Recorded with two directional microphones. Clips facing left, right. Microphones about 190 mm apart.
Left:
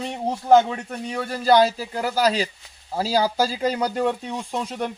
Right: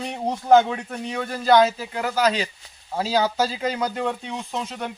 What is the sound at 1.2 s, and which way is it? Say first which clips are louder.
Speech: even; 35° left (ahead or behind).